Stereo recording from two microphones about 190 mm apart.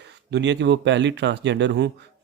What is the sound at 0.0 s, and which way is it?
Speech, 65° right (ahead or behind).